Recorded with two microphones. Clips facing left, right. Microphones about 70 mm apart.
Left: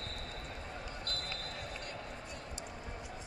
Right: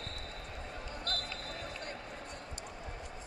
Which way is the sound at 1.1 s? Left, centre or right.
Right.